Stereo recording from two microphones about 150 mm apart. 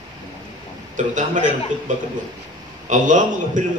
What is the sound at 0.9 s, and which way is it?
A man's voice, 55° right (ahead or behind).